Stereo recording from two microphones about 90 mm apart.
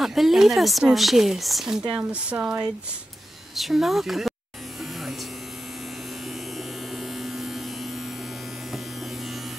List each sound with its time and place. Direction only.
0.0 s speech: centre (ahead or behind)
2.0 s speech: 15° right (ahead or behind)
3.5 s speech: centre (ahead or behind)
7.0 s electric shaver: 5° right (ahead or behind)